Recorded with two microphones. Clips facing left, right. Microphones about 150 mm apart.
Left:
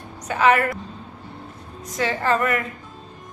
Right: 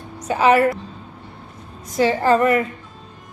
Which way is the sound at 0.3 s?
30° right (ahead or behind).